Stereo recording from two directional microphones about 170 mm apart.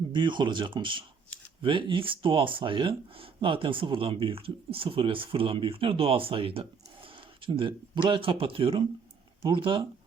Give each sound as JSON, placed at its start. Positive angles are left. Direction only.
{"t": 0.1, "sound": "speech", "side_deg": -25}